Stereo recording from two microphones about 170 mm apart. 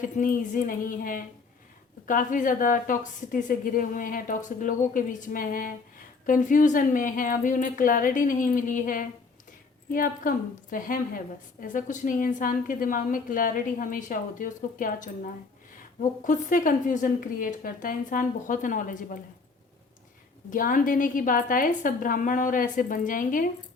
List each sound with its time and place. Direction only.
0.2 s a woman's voice: 50° left (ahead or behind)
20.5 s a woman's voice: 55° left (ahead or behind)